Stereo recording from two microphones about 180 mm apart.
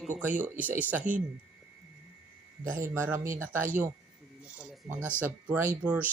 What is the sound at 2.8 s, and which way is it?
Speech, 15° right (ahead or behind).